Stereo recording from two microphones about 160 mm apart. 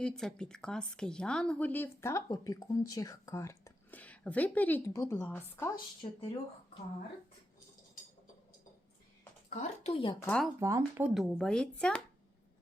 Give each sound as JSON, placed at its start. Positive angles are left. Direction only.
{"t": 0.0, "sound": "speech", "side_deg": 5}
{"t": 6.0, "sound": "speech", "side_deg": 30}
{"t": 9.5, "sound": "speech", "side_deg": 45}
{"t": 10.2, "sound": "speech", "side_deg": 5}
{"t": 10.6, "sound": "speech", "side_deg": -20}
{"t": 11.0, "sound": "speech", "side_deg": 0}